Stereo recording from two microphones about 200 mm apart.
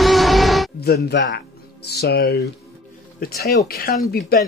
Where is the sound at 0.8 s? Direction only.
55° left (ahead or behind).